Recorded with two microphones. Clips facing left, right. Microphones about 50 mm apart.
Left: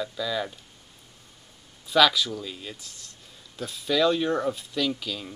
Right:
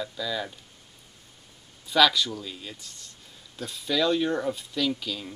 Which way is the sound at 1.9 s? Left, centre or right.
Centre.